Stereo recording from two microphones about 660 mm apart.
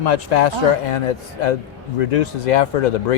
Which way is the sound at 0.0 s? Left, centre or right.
Left.